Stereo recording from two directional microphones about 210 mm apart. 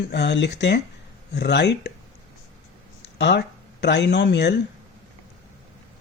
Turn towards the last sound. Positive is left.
turn(degrees=55)  # may be behind; listen again after turning